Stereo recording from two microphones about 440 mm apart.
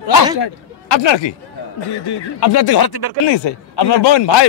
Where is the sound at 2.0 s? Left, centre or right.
Left.